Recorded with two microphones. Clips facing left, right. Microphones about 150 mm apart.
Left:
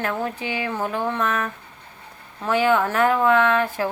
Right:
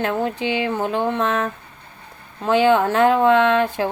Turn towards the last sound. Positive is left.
turn(degrees=-25)  # may be behind; listen again after turning